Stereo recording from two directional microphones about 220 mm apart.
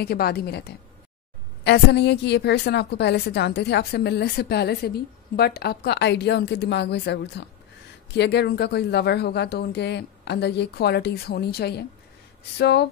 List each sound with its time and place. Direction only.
0.0 s a woman's voice: 45° left (ahead or behind)